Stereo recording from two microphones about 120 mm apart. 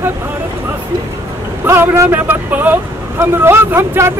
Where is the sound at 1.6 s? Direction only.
20° right (ahead or behind).